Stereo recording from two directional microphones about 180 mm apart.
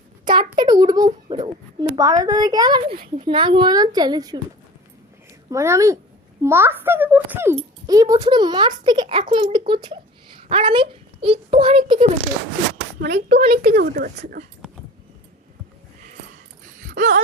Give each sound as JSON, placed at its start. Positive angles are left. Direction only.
{"t": 0.3, "sound": "a child's voice", "side_deg": -25}
{"t": 5.5, "sound": "a child's voice", "side_deg": -15}
{"t": 13.1, "sound": "speech", "side_deg": -40}
{"t": 13.7, "sound": "speech", "side_deg": -60}
{"t": 16.8, "sound": "a sound", "side_deg": -45}